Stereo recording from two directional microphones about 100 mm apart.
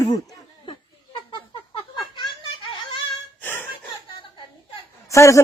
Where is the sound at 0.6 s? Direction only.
60° left (ahead or behind).